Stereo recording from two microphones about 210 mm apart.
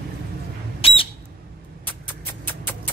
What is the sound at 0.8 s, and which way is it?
Squawk, 25° left (ahead or behind).